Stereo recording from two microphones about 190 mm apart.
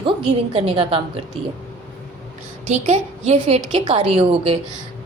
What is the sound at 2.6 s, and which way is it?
A woman's voice, 35° right (ahead or behind).